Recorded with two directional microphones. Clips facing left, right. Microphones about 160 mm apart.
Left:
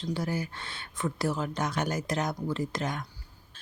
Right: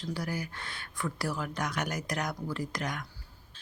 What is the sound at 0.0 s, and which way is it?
Speech, 25° left (ahead or behind).